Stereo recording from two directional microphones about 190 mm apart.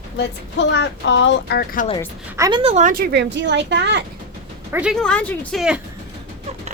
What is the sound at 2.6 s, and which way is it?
Speech, 35° right (ahead or behind).